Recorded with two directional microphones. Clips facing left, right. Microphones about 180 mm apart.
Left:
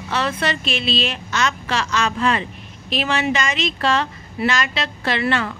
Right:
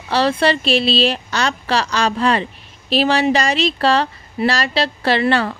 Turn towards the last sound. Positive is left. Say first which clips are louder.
# right 5 dB
turn(degrees=-35)  # may be behind; listen again after turning